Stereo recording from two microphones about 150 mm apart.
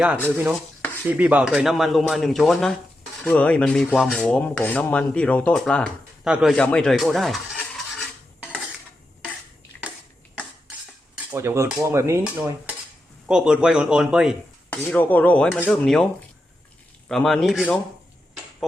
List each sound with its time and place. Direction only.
1.0 s speech: 10° right (ahead or behind)
3.9 s rub: centre (ahead or behind)
6.2 s speech: 5° right (ahead or behind)
6.5 s speech: 5° left (ahead or behind)
11.3 s cutlery: 15° right (ahead or behind)
13.2 s speech: 5° right (ahead or behind)
14.7 s rub: 10° left (ahead or behind)
17.1 s speech: centre (ahead or behind)